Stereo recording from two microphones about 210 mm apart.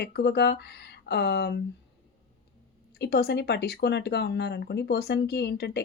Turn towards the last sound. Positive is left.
turn(degrees=50)  # may be behind; listen again after turning